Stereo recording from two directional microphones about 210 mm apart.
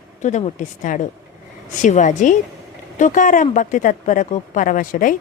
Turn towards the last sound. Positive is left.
turn(degrees=40)  # may be behind; listen again after turning